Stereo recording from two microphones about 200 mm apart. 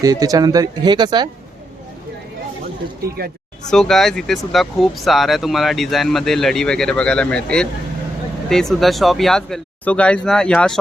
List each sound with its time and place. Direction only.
0.0 s speech: 15° right (ahead or behind)
3.7 s speech: centre (ahead or behind)